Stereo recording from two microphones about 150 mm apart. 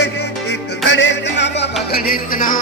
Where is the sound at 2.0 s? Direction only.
70° left (ahead or behind).